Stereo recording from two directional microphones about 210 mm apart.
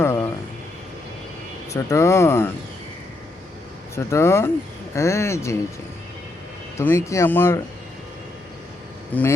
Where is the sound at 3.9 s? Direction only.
15° left (ahead or behind).